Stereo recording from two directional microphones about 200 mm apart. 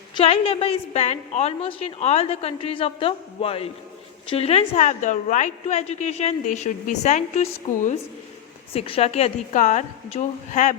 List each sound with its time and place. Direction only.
0.2 s a woman's voice: 30° left (ahead or behind)